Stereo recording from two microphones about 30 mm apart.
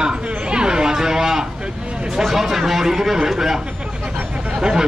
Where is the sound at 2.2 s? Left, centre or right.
Centre.